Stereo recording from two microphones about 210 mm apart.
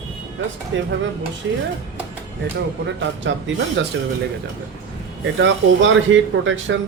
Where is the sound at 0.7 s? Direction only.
60° right (ahead or behind).